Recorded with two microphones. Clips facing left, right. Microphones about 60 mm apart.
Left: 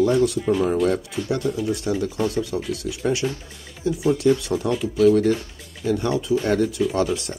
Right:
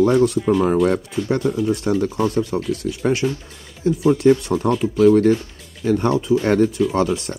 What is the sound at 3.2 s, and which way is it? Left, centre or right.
Speech, centre.